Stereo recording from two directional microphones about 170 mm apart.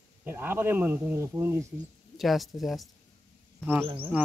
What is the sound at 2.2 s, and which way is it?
Speech, centre (ahead or behind).